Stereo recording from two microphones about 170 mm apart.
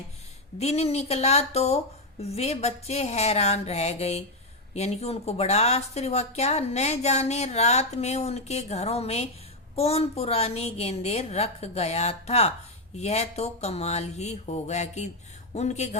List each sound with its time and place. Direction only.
0.6 s a woman's voice: 40° left (ahead or behind)